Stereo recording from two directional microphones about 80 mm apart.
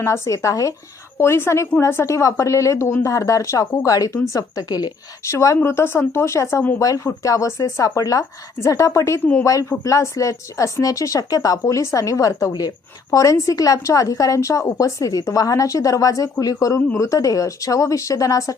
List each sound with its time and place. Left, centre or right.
0.0 s speech: left
1.2 s speech: left
5.3 s speech: left